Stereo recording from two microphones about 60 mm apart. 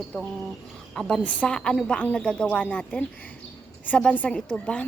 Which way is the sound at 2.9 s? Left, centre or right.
Left.